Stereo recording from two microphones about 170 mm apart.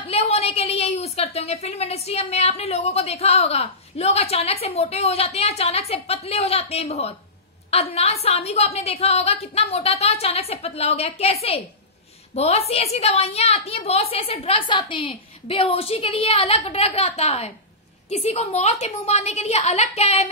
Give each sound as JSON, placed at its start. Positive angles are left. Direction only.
{"t": 0.0, "sound": "a woman's voice", "side_deg": 35}
{"t": 12.4, "sound": "a woman's voice", "side_deg": 40}